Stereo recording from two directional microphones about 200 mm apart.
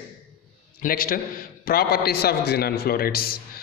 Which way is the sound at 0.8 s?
45° left (ahead or behind).